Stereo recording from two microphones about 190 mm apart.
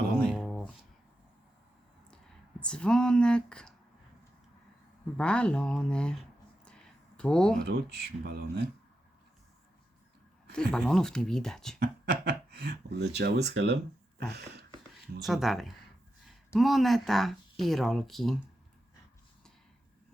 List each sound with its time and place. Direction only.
0.2 s a sound: centre (ahead or behind)
2.6 s speech: 5° left (ahead or behind)
5.1 s speech: 5° left (ahead or behind)
7.6 s speech: 60° right (ahead or behind)
10.5 s speech: 5° left (ahead or behind)
11.8 s speech: 60° right (ahead or behind)
15.2 s speech: centre (ahead or behind)